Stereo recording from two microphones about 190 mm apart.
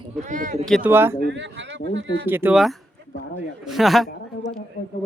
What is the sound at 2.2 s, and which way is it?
Speech, 10° right (ahead or behind).